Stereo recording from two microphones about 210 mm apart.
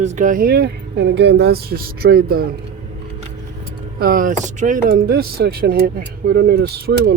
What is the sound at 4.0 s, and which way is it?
Speech, 45° right (ahead or behind).